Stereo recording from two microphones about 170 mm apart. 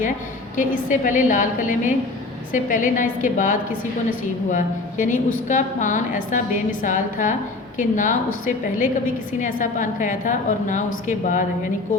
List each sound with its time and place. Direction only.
0.5 s a woman's voice: 50° left (ahead or behind)